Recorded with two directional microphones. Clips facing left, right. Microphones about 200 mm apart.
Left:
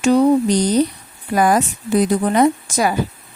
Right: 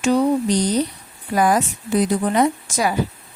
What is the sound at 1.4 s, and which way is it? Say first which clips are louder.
Speech: left 2 dB; 50° left (ahead or behind).